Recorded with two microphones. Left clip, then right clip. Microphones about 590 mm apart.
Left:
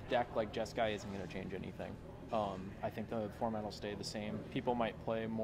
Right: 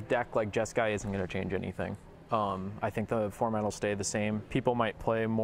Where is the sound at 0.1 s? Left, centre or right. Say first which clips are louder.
Right 6 dB; right.